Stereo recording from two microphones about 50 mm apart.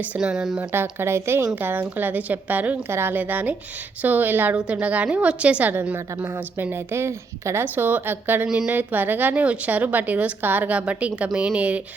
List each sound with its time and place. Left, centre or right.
0.2 s speech: centre
0.7 s speech: right
1.5 s a woman's voice: right
2.9 s a woman's voice: right
3.2 s a woman's voice: right
4.5 s a woman's voice: right
6.2 s speech: right
7.6 s a woman's voice: right
8.4 s speech: centre
8.7 s a woman's voice: right
10.7 s a woman's voice: right